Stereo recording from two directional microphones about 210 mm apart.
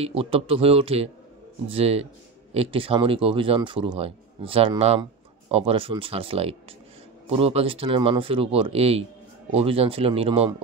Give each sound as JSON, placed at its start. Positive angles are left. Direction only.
{"t": 0.0, "sound": "speech", "side_deg": -25}